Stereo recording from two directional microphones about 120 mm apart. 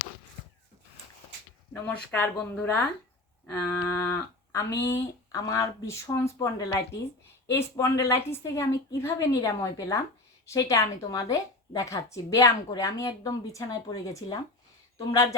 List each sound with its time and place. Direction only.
1.9 s a woman's voice: 10° left (ahead or behind)